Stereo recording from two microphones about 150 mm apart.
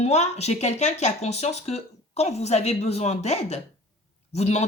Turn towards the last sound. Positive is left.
turn(degrees=50)  # may be behind; listen again after turning